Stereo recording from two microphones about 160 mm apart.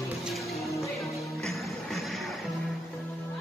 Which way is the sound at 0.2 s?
Centre (ahead or behind).